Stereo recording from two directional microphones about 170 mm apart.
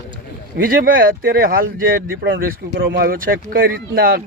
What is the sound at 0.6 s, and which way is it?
Speech, 60° right (ahead or behind).